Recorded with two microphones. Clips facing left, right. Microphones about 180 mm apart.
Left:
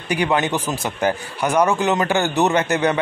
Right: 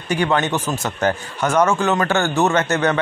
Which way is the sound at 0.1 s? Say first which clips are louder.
Right 1 dB; 15° left (ahead or behind).